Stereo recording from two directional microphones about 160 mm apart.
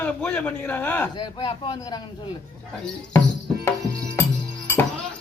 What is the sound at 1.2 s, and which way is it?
Speech, 30° left (ahead or behind).